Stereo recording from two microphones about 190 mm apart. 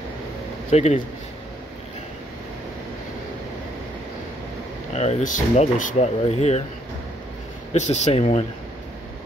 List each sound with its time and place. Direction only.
0.7 s speech: 35° left (ahead or behind)
4.9 s speech: 35° left (ahead or behind)
7.7 s speech: 35° left (ahead or behind)